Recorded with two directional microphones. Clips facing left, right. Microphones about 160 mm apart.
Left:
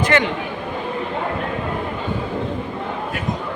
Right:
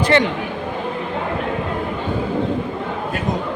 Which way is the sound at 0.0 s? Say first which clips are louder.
Right 2 dB; 35° right (ahead or behind).